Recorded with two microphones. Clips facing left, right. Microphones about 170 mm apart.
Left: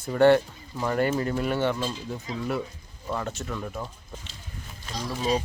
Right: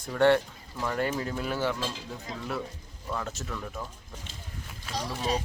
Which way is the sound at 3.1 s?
Centre (ahead or behind).